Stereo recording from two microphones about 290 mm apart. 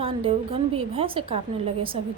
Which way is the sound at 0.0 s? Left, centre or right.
Centre.